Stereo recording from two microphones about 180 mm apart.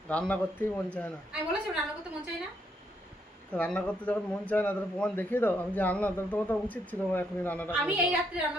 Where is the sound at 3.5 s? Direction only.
5° left (ahead or behind).